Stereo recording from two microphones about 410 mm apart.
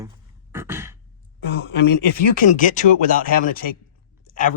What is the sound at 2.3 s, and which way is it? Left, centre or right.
Speech, centre.